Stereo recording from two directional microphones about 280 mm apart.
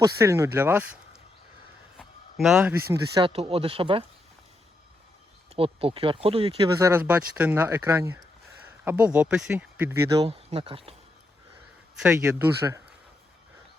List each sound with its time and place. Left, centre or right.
0.0 s speech: centre
2.0 s a sound: centre
2.9 s speech: centre
5.5 s speech: centre
6.7 s speech: centre
11.9 s speech: centre